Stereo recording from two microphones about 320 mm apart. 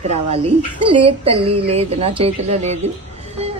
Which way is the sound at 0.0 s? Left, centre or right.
Centre.